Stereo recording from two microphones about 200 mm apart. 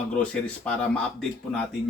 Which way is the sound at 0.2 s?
5° left (ahead or behind).